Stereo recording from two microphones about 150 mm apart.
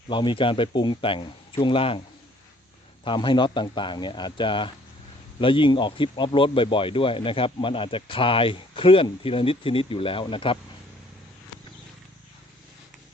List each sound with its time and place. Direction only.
0.1 s speech: 30° left (ahead or behind)
3.0 s speech: 30° left (ahead or behind)